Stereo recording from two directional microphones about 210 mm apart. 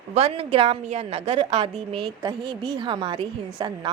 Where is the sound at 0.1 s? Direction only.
30° right (ahead or behind).